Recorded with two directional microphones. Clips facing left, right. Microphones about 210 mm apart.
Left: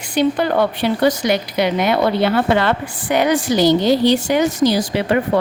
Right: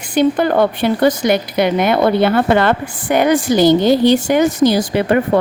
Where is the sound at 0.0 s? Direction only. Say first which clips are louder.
Right 3 dB; 50° right (ahead or behind).